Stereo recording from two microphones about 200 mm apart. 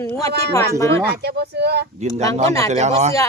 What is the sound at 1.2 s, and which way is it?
Speech, 55° right (ahead or behind).